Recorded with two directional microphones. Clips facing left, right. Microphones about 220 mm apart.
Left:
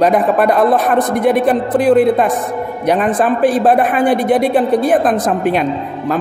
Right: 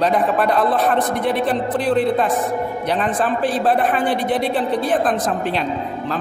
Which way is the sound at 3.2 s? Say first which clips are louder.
Left 7 dB; 15° left (ahead or behind).